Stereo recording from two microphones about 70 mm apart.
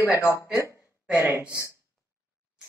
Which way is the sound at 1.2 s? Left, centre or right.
Right.